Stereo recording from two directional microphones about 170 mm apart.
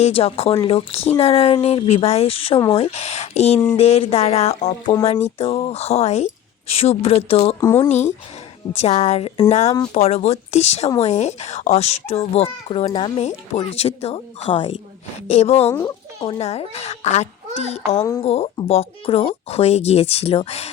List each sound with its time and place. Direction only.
0.0 s speech: 35° left (ahead or behind)
7.6 s speech: 15° left (ahead or behind)
7.9 s speech: 40° left (ahead or behind)
15.6 s speech: 15° left (ahead or behind)
16.2 s speech: 35° left (ahead or behind)